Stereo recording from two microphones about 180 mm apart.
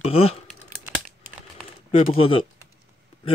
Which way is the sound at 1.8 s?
30° left (ahead or behind).